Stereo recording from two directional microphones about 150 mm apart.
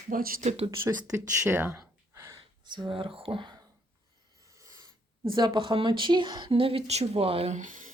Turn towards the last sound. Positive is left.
turn(degrees=-60)  # may be behind; listen again after turning